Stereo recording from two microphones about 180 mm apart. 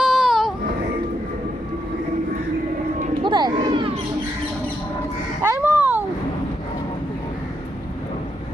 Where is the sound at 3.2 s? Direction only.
25° right (ahead or behind).